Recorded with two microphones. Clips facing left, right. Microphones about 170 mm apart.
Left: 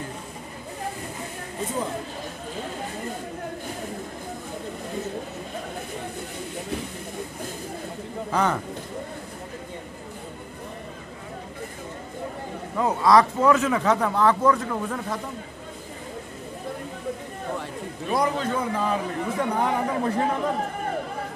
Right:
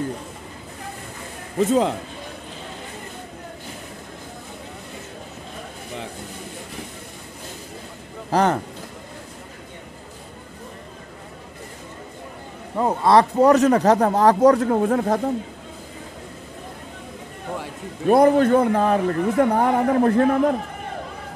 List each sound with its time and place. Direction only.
1.6 s speech: 85° right
8.3 s speech: 35° right (ahead or behind)
12.7 s speech: 30° right (ahead or behind)
14.6 s speech: 55° right (ahead or behind)
18.0 s speech: 55° right (ahead or behind)